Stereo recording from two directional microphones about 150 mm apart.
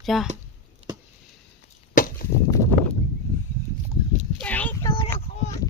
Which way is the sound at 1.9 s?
65° left (ahead or behind).